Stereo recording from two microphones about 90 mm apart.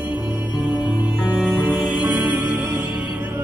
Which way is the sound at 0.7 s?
10° right (ahead or behind).